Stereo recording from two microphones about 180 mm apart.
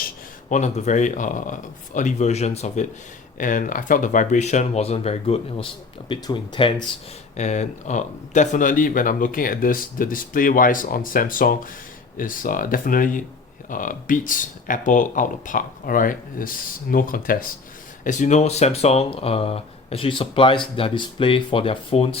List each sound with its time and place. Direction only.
0.5 s speech: 40° left (ahead or behind); by 6.7 s 25° left (ahead or behind)
7.3 s speech: 40° left (ahead or behind)